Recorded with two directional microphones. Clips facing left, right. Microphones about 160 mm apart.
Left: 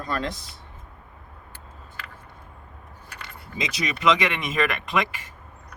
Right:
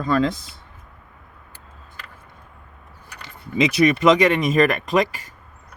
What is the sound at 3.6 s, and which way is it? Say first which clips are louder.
Speech: right 9 dB; 60° right (ahead or behind).